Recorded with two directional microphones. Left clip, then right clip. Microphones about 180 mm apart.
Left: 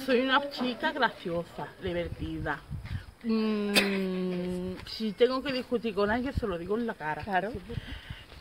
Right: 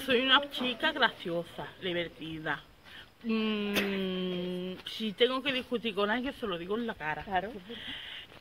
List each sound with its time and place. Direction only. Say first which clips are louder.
0.0 s speech: even; centre (ahead or behind)
7.2 s speech: left 4 dB; 55° left (ahead or behind)